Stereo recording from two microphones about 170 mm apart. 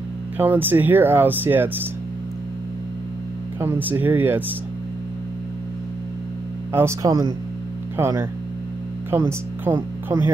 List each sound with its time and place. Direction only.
0.4 s speech: 10° right (ahead or behind)
3.5 s speech: 15° right (ahead or behind)
6.7 s speech: 15° right (ahead or behind)